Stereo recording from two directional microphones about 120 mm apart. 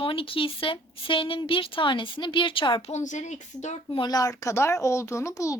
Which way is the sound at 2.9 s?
85° left.